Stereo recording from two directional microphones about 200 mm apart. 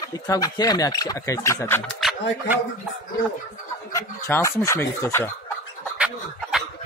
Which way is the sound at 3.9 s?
15° left (ahead or behind).